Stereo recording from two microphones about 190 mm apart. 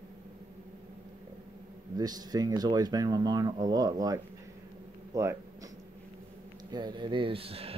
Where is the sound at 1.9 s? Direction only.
20° right (ahead or behind).